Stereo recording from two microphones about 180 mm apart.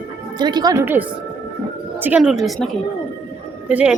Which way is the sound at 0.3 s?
25° right (ahead or behind).